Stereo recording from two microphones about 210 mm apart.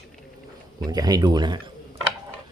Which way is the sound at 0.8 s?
20° right (ahead or behind).